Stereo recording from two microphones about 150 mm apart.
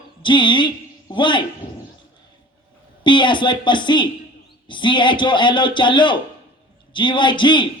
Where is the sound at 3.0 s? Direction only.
30° left (ahead or behind).